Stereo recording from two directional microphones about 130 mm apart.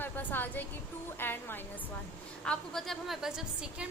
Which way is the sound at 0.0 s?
15° left (ahead or behind).